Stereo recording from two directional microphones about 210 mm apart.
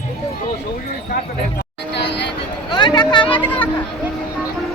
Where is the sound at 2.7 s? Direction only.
20° left (ahead or behind).